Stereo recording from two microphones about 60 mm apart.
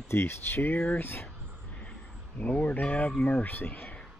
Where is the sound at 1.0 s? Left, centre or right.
Left.